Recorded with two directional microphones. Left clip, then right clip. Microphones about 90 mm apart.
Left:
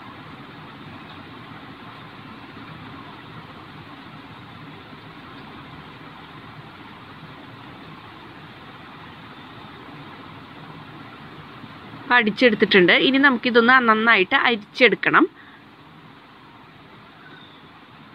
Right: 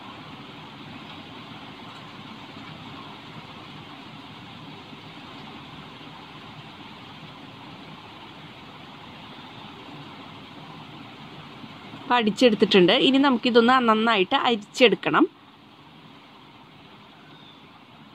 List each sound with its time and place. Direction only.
12.1 s speech: 65° right (ahead or behind)